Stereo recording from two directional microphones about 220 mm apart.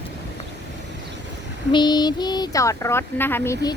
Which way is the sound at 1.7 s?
20° left (ahead or behind).